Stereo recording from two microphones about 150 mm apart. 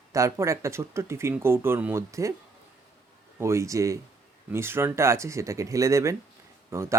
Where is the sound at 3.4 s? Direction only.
20° right (ahead or behind).